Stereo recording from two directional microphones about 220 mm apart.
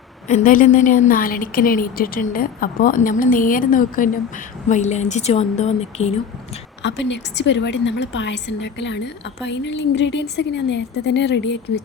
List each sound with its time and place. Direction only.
0.3 s a woman's voice: 35° left (ahead or behind)
6.8 s a woman's voice: 55° left (ahead or behind)